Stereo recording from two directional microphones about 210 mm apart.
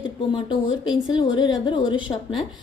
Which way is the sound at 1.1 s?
20° left (ahead or behind).